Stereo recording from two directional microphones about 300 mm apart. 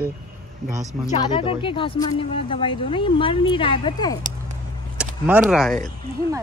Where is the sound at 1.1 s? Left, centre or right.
Centre.